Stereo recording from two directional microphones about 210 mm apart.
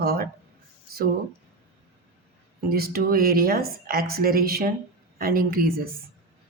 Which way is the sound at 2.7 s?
45° right (ahead or behind).